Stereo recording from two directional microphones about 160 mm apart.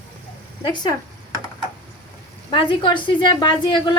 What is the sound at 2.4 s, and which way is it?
A woman's voice, 30° left (ahead or behind).